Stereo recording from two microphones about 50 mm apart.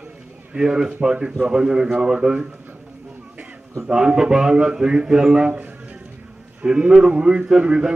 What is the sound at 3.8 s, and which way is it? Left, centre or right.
Speech, centre.